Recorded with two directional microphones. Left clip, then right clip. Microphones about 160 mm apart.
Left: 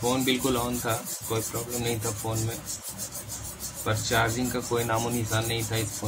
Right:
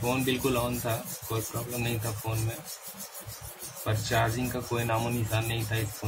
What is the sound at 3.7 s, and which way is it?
Rub, centre (ahead or behind).